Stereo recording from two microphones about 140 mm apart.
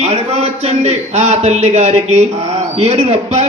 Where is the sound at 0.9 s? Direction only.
50° right (ahead or behind).